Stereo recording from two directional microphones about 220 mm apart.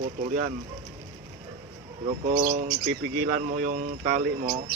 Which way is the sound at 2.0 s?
35° right (ahead or behind).